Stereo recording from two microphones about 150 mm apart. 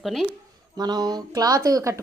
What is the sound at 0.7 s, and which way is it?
Speech, 25° right (ahead or behind).